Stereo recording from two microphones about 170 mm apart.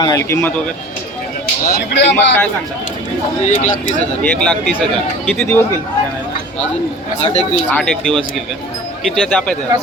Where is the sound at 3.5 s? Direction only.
45° left (ahead or behind).